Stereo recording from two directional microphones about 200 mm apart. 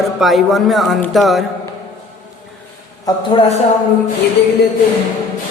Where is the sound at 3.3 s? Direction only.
30° left (ahead or behind).